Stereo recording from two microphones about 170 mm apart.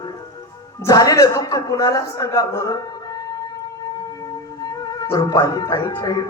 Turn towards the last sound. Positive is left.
turn(degrees=20)  # may be behind; listen again after turning